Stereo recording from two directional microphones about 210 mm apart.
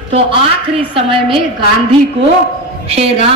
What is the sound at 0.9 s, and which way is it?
Speech, 25° right (ahead or behind).